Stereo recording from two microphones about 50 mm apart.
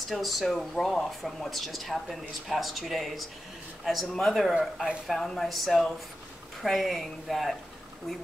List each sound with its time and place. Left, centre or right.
0.1 s speech: centre